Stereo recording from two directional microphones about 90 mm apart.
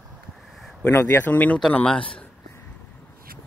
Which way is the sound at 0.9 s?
30° left (ahead or behind).